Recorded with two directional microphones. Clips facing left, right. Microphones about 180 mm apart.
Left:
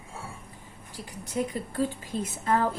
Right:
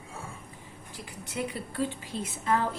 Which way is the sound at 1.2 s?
40° left (ahead or behind).